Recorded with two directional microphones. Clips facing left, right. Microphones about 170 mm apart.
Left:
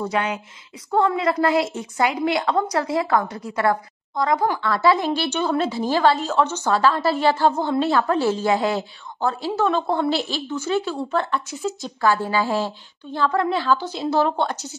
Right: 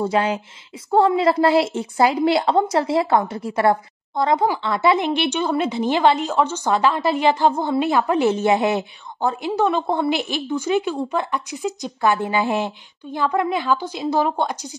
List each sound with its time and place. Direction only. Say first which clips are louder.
0.0 s a woman's voice: right 4 dB; 30° right (ahead or behind); by 14.8 s 10° right (ahead or behind)